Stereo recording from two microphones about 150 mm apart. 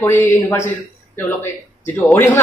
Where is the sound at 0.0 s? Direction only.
15° left (ahead or behind).